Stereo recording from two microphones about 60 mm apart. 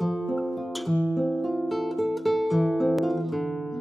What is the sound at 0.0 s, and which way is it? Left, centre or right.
Music, centre.